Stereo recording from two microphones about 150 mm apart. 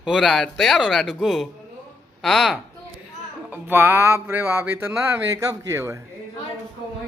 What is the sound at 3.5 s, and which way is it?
Speech, 15° right (ahead or behind).